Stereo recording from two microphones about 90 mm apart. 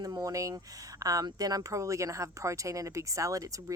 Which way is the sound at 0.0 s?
45° right (ahead or behind).